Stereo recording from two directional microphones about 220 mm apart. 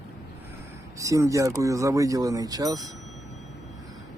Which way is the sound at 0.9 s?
15° right (ahead or behind).